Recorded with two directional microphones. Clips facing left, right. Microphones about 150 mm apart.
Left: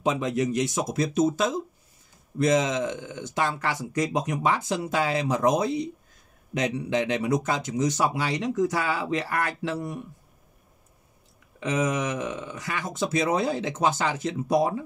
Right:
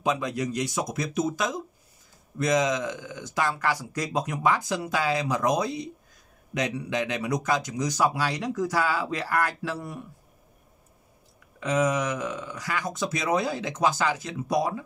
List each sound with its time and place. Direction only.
0.0 s speech: 25° left (ahead or behind)
11.6 s speech: 20° left (ahead or behind)